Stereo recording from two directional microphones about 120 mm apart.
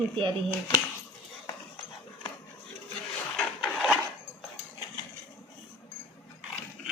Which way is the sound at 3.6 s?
Centre (ahead or behind).